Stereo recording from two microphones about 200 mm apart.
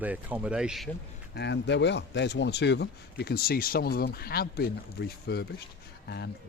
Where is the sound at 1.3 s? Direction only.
60° left (ahead or behind).